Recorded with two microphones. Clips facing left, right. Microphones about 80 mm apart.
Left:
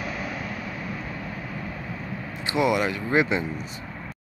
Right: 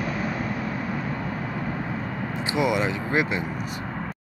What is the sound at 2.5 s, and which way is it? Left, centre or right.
Speech, centre.